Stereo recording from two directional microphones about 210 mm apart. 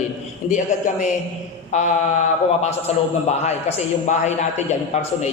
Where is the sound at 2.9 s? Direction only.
30° left (ahead or behind).